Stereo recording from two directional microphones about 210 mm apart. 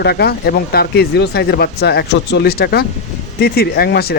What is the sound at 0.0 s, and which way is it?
Speech, 50° left (ahead or behind).